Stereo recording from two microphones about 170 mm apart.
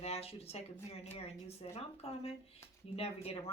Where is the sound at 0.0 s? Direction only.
35° left (ahead or behind).